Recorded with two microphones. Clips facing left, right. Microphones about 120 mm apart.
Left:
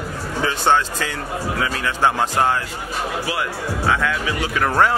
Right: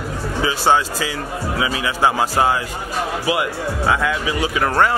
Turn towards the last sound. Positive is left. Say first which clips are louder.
# right 1 dB
turn(degrees=0)  # may be behind; listen again after turning